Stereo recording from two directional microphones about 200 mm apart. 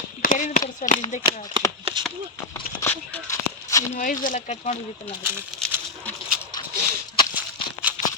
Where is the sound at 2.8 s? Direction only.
10° left (ahead or behind).